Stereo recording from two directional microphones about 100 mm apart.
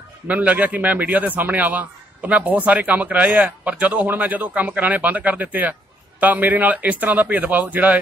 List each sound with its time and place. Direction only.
0.3 s a man's voice: 15° right (ahead or behind)